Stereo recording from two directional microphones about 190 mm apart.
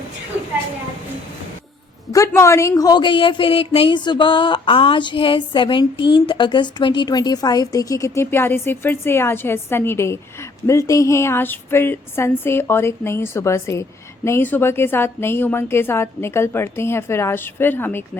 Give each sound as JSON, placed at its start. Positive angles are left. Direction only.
{"t": 2.1, "sound": "a woman's voice", "side_deg": 15}